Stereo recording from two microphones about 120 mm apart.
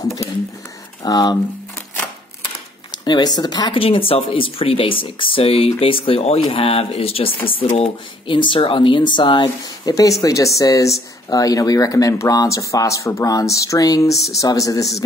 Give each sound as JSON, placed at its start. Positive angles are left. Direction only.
{"t": 1.0, "sound": "speech", "side_deg": 35}
{"t": 2.9, "sound": "speech", "side_deg": 35}
{"t": 3.8, "sound": "speech", "side_deg": 50}
{"t": 9.8, "sound": "speech", "side_deg": 30}